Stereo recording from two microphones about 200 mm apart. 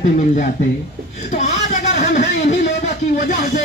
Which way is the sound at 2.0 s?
35° left (ahead or behind).